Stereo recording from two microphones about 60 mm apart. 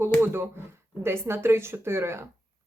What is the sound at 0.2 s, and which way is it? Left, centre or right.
Speech, right.